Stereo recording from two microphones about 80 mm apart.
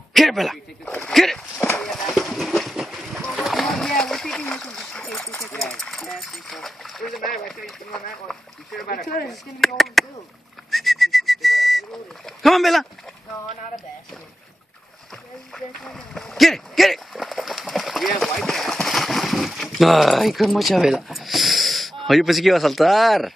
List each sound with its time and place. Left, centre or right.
0.1 s speech: centre
1.8 s boat: centre
9.3 s speech: centre
10.7 s whistling: centre
12.4 s speech: centre
15.5 s a sound: centre